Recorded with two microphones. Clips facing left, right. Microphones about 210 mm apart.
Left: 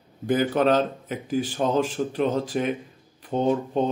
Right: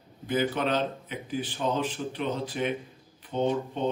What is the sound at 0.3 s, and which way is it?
Speech, 40° left (ahead or behind).